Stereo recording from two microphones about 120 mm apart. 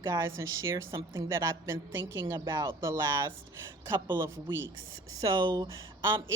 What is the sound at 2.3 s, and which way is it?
A woman's voice, 35° right (ahead or behind).